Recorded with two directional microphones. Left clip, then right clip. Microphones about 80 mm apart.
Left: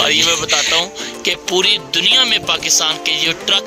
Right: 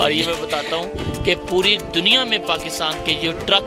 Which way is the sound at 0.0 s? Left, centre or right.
Centre.